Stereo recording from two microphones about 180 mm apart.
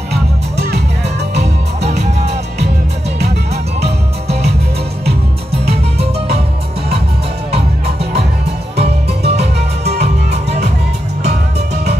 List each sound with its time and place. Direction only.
0.1 s music: 65° right (ahead or behind)
3.8 s music: 65° right (ahead or behind)
7.5 s music: 35° right (ahead or behind)
11.2 s music: 65° right (ahead or behind)